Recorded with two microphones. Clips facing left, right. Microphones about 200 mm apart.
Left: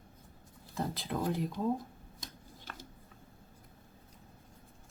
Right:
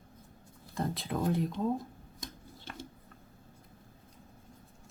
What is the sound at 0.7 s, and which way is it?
Speech, centre (ahead or behind).